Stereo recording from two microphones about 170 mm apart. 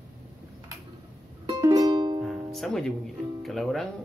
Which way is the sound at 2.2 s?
Centre (ahead or behind).